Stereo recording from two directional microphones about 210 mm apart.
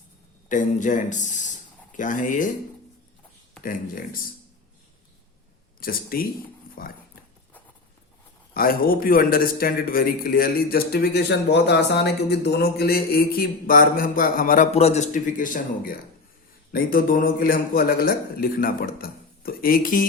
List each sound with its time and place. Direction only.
0.4 s speech: 35° left (ahead or behind)
3.6 s speech: 40° left (ahead or behind)
5.8 s a man's voice: 45° left (ahead or behind)
8.5 s a man's voice: 45° left (ahead or behind)